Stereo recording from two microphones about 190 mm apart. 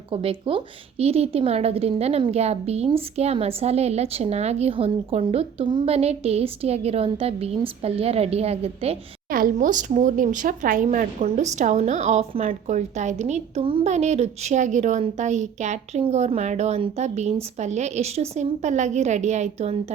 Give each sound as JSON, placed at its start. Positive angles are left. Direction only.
{"t": 0.1, "sound": "a woman's voice", "side_deg": -30}
{"t": 9.3, "sound": "a woman's voice", "side_deg": -45}